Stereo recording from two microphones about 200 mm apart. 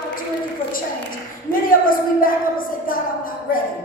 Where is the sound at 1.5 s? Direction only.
45° left (ahead or behind).